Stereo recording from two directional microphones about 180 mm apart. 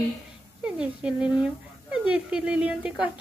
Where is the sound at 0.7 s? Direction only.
5° right (ahead or behind).